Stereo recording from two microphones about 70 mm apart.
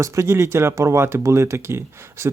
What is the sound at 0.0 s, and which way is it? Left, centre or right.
Speech, right.